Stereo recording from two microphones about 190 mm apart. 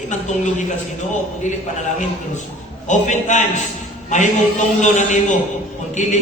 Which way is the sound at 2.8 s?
40° left (ahead or behind).